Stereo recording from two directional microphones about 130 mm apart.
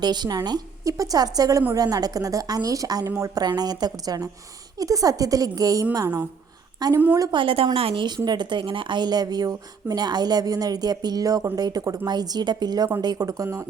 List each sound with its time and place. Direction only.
0.0 s a woman's voice: 35° right (ahead or behind)
7.3 s a woman's voice: 40° right (ahead or behind); by 13.7 s 25° right (ahead or behind)